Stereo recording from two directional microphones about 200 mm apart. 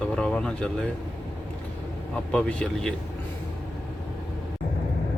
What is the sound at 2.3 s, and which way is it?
Speech, 5° left (ahead or behind).